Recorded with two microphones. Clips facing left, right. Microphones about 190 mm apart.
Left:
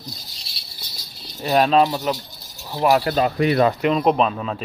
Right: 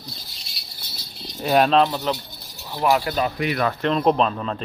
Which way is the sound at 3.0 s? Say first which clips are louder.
Left 4 dB; 40° left (ahead or behind).